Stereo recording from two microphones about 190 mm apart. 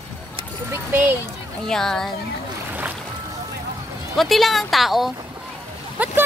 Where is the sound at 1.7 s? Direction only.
5° left (ahead or behind).